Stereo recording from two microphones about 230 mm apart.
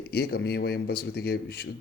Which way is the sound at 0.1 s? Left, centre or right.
Left.